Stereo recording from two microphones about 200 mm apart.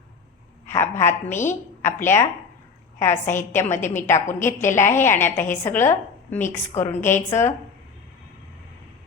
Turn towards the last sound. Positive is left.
turn(degrees=15)  # may be behind; listen again after turning